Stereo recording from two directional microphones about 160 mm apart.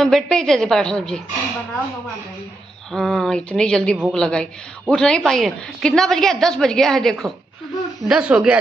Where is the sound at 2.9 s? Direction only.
Centre (ahead or behind).